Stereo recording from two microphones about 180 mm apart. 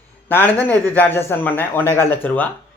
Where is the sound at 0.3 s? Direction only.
10° left (ahead or behind).